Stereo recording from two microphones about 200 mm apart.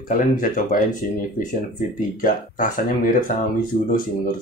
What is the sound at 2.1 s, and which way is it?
Speech, 40° left (ahead or behind).